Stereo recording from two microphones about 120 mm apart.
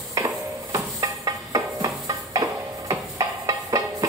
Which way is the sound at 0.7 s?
30° right (ahead or behind).